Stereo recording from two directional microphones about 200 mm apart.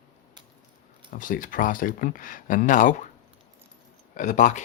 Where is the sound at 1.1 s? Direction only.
40° left (ahead or behind).